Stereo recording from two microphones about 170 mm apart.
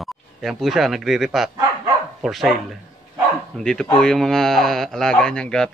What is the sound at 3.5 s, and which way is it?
Speech, 5° left (ahead or behind).